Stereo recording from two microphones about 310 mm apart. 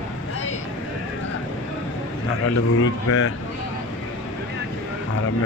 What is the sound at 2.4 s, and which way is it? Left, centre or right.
Speech, left.